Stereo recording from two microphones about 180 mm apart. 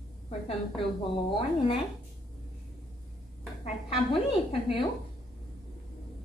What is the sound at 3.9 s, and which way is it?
Speech, 30° left (ahead or behind).